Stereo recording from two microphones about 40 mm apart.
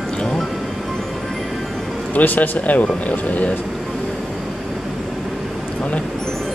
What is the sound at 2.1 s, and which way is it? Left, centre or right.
Speech, left.